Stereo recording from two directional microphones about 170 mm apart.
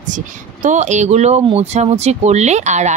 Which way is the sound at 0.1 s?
45° right (ahead or behind).